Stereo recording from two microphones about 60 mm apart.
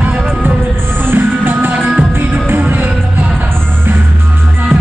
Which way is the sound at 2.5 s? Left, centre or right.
Right.